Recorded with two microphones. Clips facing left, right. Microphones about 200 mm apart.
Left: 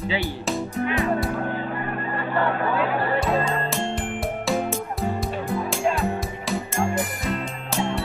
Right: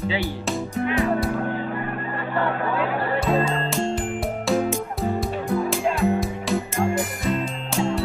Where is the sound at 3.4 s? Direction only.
5° right (ahead or behind).